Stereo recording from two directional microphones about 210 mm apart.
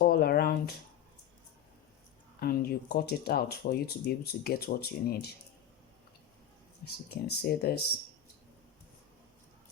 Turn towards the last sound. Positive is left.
turn(degrees=50)  # may be behind; listen again after turning